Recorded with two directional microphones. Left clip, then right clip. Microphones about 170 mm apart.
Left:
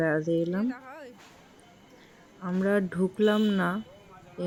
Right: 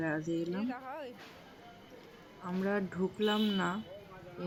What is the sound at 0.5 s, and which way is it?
Speech, 20° left (ahead or behind).